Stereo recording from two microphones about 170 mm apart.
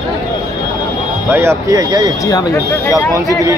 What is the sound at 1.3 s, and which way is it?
Speech, 15° right (ahead or behind).